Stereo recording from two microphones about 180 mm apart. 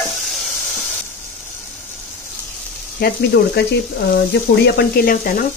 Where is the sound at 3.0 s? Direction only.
70° left (ahead or behind); by 5.4 s 50° left (ahead or behind).